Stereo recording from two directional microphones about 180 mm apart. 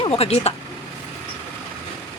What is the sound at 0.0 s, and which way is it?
Speech, 35° left (ahead or behind).